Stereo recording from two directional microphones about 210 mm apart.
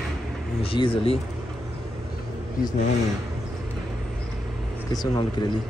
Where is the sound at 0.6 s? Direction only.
25° left (ahead or behind).